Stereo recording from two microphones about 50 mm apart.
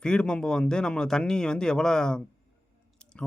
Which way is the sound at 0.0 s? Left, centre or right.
Centre.